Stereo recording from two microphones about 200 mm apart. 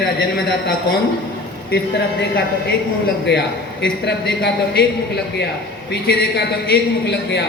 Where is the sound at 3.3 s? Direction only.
55° left (ahead or behind).